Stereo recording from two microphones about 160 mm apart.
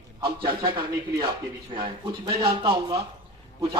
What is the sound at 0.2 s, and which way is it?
A man's voice, 35° right (ahead or behind).